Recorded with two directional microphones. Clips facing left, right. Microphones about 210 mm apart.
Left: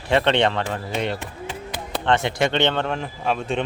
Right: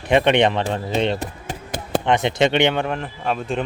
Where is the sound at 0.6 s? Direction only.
30° right (ahead or behind).